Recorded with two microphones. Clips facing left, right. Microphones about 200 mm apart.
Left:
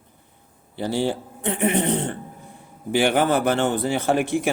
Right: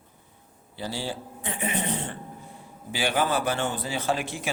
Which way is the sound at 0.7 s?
60° left (ahead or behind).